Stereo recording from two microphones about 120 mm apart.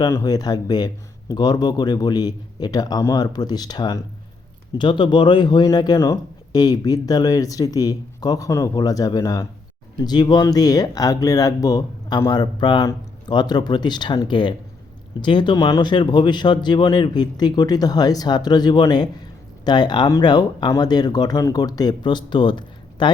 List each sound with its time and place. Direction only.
0.1 s speech: 30° left (ahead or behind)